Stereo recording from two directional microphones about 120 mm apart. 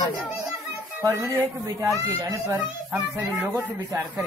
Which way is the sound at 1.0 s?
25° right (ahead or behind).